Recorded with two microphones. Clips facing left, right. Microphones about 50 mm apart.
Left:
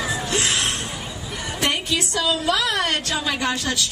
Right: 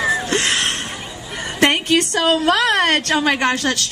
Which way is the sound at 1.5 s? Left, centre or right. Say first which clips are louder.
Right 8 dB; right.